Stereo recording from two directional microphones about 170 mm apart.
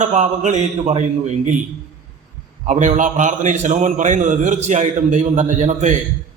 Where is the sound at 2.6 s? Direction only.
45° right (ahead or behind).